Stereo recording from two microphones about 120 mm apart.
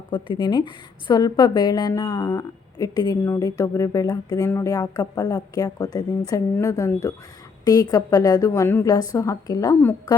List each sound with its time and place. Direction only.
0.1 s a woman's voice: 40° left (ahead or behind)